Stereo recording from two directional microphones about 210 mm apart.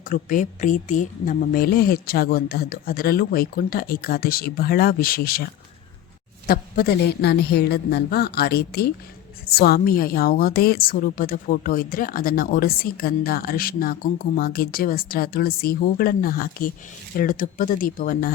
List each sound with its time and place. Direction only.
0.1 s a woman's voice: 40° left (ahead or behind)
6.5 s a woman's voice: 45° left (ahead or behind)